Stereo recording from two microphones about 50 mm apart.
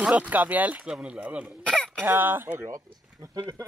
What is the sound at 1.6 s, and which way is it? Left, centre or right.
Cough, left.